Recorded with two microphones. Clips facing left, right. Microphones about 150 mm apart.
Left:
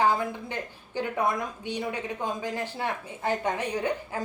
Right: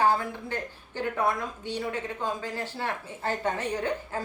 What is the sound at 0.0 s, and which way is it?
A woman's voice, 15° left (ahead or behind).